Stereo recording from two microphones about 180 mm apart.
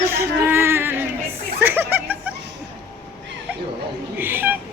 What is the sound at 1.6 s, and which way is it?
Chuckle, 10° right (ahead or behind).